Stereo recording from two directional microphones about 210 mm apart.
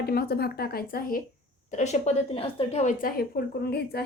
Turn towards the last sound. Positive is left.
turn(degrees=50)  # may be behind; listen again after turning